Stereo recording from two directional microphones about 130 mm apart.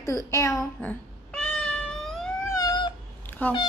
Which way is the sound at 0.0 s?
25° left (ahead or behind).